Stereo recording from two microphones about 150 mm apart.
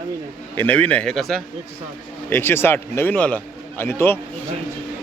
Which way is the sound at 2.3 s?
15° left (ahead or behind).